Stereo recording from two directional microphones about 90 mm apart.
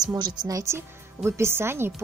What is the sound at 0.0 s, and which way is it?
A woman's voice, 50° right (ahead or behind).